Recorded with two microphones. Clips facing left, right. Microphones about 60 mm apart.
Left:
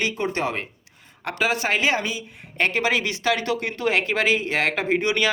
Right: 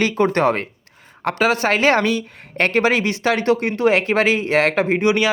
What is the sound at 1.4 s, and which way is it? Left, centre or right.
Speech, right.